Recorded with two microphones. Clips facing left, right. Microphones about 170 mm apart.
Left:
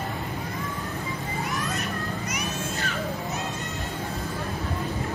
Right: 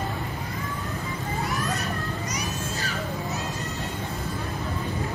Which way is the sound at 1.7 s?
35° right (ahead or behind).